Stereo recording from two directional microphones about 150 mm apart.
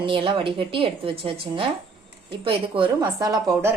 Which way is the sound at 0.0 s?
35° right (ahead or behind).